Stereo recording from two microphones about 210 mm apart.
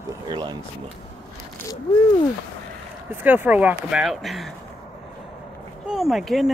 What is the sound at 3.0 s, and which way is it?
Speech, 5° right (ahead or behind).